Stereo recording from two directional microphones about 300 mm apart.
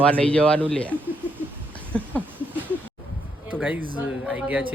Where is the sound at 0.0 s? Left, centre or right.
Centre.